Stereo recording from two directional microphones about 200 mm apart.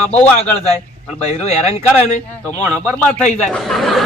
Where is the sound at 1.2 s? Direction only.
35° left (ahead or behind).